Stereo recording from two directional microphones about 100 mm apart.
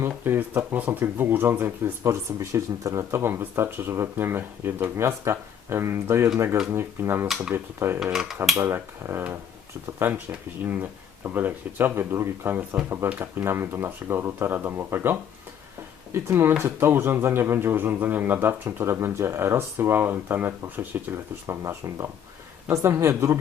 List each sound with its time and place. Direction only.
0.0 s speech: 20° right (ahead or behind)
8.1 s dishes: 5° right (ahead or behind)
8.6 s speech: 25° right (ahead or behind)
21.4 s speech: 30° right (ahead or behind)